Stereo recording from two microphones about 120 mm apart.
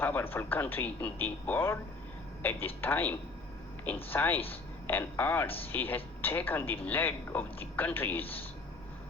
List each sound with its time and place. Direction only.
0.0 s speech: 15° left (ahead or behind)